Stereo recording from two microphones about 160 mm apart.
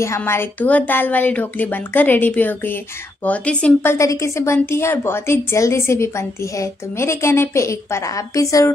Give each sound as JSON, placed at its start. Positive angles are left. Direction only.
{"t": 0.0, "sound": "a woman's voice", "side_deg": 15}